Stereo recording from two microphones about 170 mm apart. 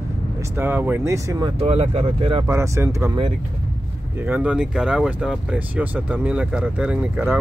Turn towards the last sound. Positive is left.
turn(degrees=-10)  # may be behind; listen again after turning